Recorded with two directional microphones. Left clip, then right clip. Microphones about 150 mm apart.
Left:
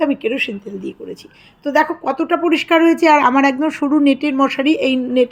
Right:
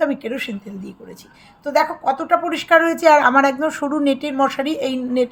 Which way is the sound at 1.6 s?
30° left (ahead or behind).